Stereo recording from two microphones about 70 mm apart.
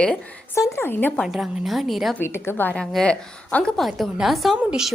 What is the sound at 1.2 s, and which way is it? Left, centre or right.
Speech, centre.